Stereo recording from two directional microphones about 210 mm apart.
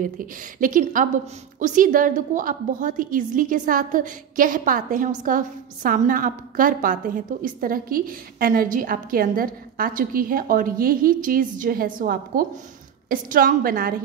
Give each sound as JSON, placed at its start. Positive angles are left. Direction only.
{"t": 0.0, "sound": "a woman's voice", "side_deg": -40}